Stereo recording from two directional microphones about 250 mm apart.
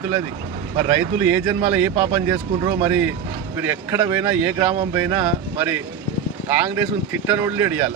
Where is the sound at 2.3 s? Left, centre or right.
Centre.